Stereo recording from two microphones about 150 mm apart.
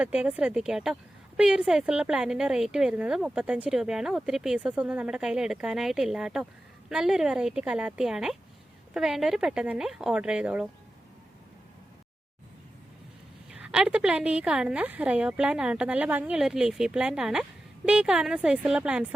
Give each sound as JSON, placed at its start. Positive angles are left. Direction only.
{"t": 0.0, "sound": "a woman's voice", "side_deg": -10}
{"t": 13.5, "sound": "a woman's voice", "side_deg": -5}